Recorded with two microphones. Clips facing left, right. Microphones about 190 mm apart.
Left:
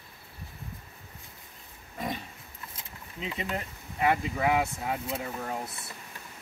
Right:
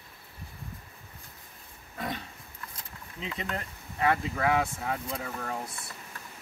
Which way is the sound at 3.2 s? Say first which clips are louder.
Left 2 dB; 10° left (ahead or behind).